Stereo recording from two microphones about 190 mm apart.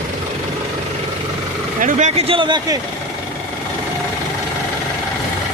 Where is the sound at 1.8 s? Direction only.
40° right (ahead or behind); by 2.8 s 20° right (ahead or behind).